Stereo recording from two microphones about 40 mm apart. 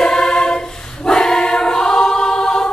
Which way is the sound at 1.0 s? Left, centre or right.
Centre.